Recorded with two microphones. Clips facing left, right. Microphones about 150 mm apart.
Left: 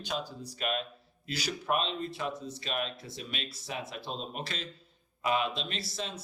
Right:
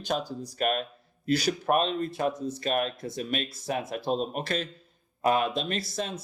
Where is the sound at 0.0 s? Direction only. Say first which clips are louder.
Right 6 dB; 45° right (ahead or behind).